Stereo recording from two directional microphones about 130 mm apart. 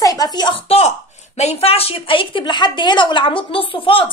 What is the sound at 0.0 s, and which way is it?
A woman's voice, 30° left (ahead or behind).